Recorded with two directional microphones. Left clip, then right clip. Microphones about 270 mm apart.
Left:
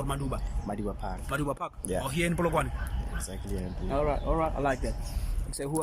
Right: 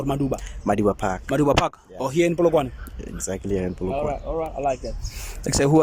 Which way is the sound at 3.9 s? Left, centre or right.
Centre.